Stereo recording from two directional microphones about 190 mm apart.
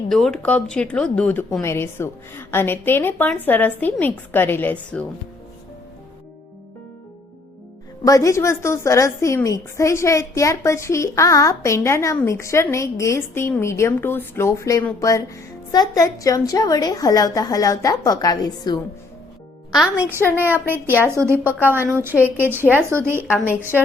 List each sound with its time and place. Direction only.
0.1 s a woman's voice: centre (ahead or behind)
8.0 s a woman's voice: 20° left (ahead or behind)
19.7 s a woman's voice: 5° right (ahead or behind)